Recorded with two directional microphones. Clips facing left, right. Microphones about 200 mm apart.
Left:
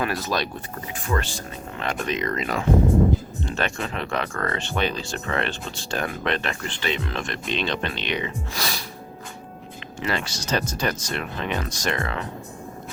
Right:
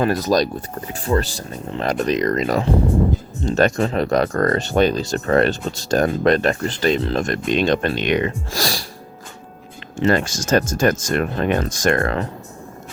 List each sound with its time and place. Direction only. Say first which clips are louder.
0.0 s speech: right 8 dB; 40° right (ahead or behind)
10.1 s speech: right 9 dB; 45° right (ahead or behind)